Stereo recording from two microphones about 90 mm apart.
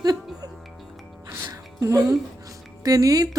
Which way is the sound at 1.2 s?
30° right (ahead or behind).